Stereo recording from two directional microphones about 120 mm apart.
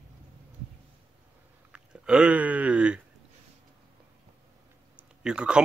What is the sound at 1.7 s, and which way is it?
Speech, 10° right (ahead or behind).